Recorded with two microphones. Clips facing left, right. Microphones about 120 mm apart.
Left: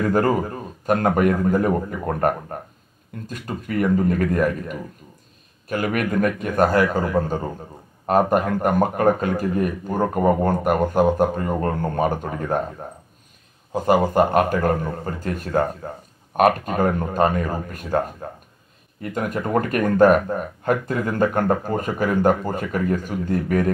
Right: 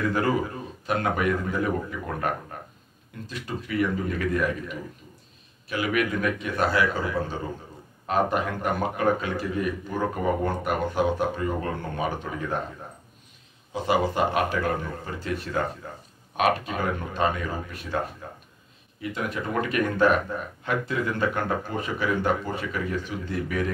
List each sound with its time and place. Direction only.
0.0 s speech: 45° left (ahead or behind)
13.7 s speech: 45° left (ahead or behind)